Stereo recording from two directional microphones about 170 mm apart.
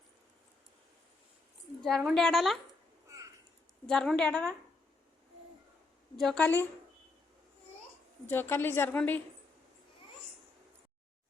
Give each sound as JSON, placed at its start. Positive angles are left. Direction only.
{"t": 1.8, "sound": "a woman's voice", "side_deg": 0}
{"t": 3.1, "sound": "a sound", "side_deg": -20}
{"t": 3.8, "sound": "a woman's voice", "side_deg": 5}
{"t": 6.1, "sound": "a woman's voice", "side_deg": 5}
{"t": 8.3, "sound": "a woman's voice", "side_deg": 15}